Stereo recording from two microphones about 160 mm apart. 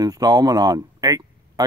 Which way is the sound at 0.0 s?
25° right (ahead or behind).